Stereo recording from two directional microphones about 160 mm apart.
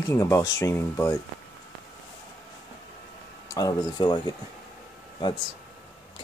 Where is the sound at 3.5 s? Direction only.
20° left (ahead or behind).